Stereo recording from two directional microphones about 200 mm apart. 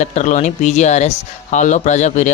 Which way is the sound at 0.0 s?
35° left (ahead or behind).